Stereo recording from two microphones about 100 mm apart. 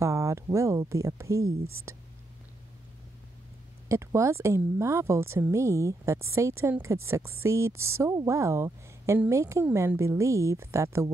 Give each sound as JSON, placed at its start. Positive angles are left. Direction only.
{"t": 0.0, "sound": "speech", "side_deg": -30}
{"t": 3.9, "sound": "a woman's voice", "side_deg": -30}